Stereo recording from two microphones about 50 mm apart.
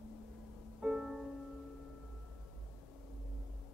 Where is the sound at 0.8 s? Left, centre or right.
Right.